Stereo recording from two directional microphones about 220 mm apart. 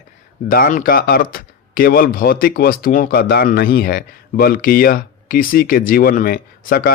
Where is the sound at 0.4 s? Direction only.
40° left (ahead or behind).